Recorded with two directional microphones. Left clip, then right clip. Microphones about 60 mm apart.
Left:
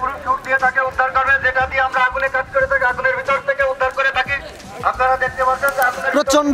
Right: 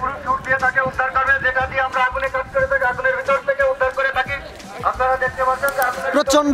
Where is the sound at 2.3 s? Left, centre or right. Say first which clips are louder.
Left 2 dB; left.